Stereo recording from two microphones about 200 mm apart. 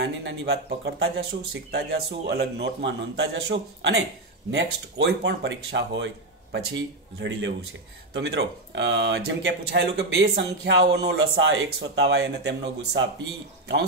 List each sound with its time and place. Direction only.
0.0 s speech: 60° right (ahead or behind)